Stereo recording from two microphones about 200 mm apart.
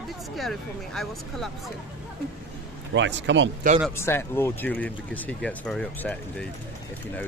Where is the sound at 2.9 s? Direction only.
65° right (ahead or behind).